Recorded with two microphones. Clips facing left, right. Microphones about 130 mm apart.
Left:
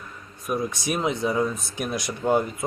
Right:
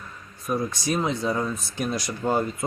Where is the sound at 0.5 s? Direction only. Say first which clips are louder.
Right 1 dB; 5° left (ahead or behind).